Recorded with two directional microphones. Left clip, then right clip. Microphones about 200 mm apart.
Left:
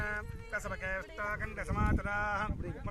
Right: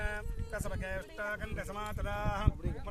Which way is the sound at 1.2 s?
30° right (ahead or behind).